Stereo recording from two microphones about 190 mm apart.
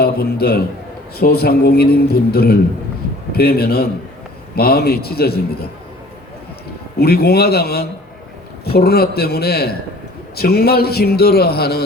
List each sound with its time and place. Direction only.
0.0 s a man's voice: 55° left (ahead or behind)
7.0 s a man's voice: 55° left (ahead or behind)